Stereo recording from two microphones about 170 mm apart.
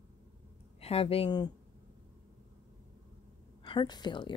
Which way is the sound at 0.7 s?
35° left (ahead or behind).